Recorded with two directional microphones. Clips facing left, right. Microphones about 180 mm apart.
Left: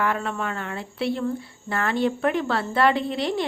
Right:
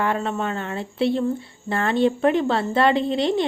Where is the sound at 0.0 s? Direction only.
25° right (ahead or behind).